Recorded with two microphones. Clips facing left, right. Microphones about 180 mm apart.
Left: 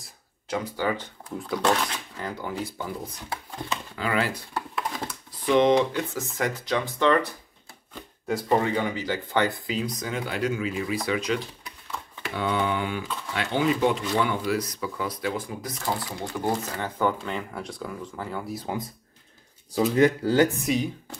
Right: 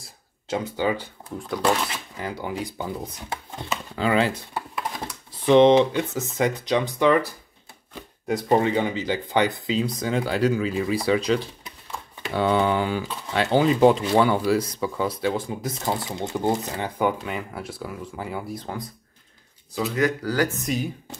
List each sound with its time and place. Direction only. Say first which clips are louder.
0.5 s speech: right 3 dB; 20° right (ahead or behind)
8.3 s speech: right 3 dB; 20° right (ahead or behind)
18.5 s speech: left 1 dB; 5° left (ahead or behind)
19.7 s speech: left 3 dB; 35° left (ahead or behind)
20.6 s speech: left 1 dB; centre (ahead or behind)